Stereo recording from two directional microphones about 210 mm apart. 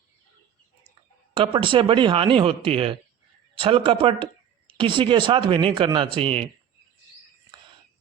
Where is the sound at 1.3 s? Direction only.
25° right (ahead or behind).